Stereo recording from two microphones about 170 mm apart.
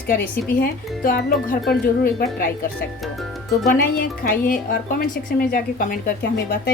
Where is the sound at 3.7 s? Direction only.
60° left (ahead or behind).